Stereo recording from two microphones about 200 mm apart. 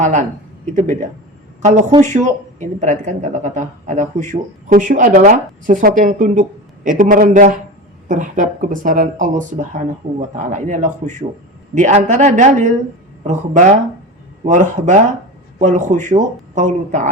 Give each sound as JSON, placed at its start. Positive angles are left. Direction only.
{"t": 0.0, "sound": "a man's voice", "side_deg": -40}